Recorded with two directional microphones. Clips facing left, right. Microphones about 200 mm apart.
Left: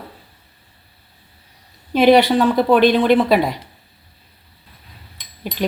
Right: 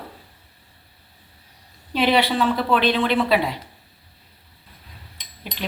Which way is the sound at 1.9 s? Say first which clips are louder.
Left 7 dB; 45° left (ahead or behind).